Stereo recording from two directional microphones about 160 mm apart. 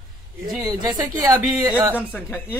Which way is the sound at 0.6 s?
20° right (ahead or behind).